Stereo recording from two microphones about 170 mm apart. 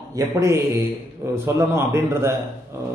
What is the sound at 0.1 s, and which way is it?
A man's voice, 15° right (ahead or behind).